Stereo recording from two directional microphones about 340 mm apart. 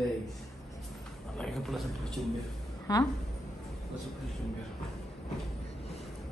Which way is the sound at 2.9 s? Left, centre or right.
Centre.